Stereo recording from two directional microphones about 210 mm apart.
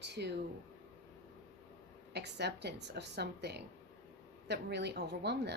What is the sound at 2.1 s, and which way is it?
A woman's voice, 55° right (ahead or behind).